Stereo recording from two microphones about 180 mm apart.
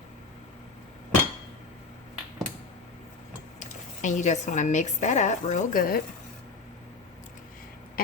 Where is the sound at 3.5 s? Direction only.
45° left (ahead or behind).